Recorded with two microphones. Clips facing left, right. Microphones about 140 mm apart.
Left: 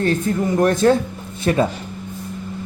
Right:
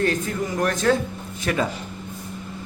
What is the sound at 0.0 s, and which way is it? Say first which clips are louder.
Speech: left 4 dB; 30° left (ahead or behind).